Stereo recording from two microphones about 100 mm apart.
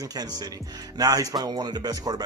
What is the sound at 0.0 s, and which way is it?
Speech, 40° right (ahead or behind).